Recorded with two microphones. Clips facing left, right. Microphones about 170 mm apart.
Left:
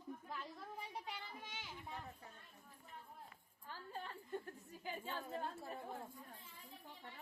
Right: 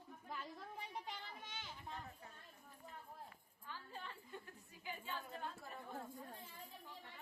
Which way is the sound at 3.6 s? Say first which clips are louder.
Left 2 dB; 45° left (ahead or behind).